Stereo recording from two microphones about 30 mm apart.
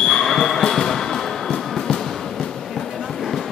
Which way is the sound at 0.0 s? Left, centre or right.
Centre.